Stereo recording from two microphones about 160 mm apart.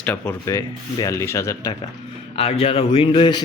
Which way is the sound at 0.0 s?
10° left (ahead or behind).